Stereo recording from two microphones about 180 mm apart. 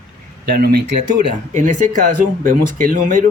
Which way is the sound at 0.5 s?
60° right (ahead or behind).